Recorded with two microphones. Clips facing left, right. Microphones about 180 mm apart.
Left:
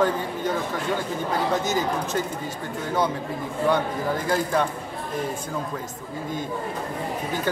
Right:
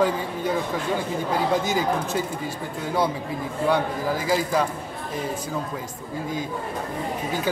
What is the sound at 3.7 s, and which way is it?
Speech, 5° right (ahead or behind).